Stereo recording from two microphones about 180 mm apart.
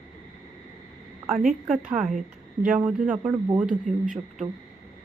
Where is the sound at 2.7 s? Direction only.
10° right (ahead or behind).